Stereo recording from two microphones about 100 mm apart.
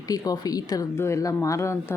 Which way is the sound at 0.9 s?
25° left (ahead or behind).